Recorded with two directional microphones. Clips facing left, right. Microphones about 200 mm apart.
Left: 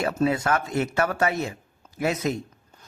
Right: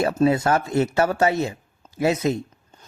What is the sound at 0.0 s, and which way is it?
A man's voice, 30° right (ahead or behind).